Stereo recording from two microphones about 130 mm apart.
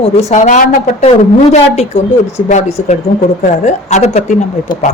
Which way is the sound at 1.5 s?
60° left (ahead or behind).